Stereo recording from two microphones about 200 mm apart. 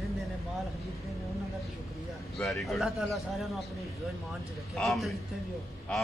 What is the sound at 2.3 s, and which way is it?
Speech, centre (ahead or behind).